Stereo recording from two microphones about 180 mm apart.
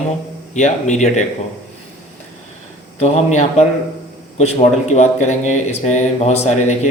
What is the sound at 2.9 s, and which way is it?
Speech, 40° left (ahead or behind).